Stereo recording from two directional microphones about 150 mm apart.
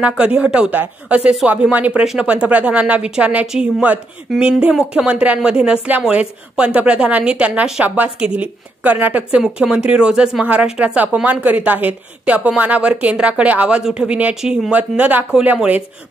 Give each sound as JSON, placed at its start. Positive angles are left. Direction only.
{"t": 0.0, "sound": "speech", "side_deg": -10}